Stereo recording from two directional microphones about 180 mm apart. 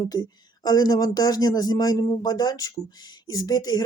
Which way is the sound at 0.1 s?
20° left (ahead or behind).